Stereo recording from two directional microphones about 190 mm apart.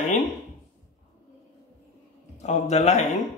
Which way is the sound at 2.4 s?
35° left (ahead or behind).